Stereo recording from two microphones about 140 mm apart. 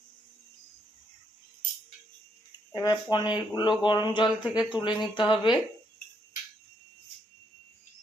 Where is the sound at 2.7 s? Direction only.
30° left (ahead or behind).